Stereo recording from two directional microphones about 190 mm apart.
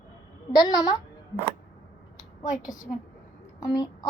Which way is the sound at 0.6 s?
20° left (ahead or behind).